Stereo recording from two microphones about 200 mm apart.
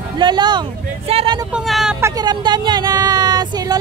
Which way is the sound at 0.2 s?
20° right (ahead or behind).